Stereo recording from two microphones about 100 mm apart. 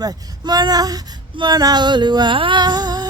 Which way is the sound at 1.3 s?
45° right (ahead or behind).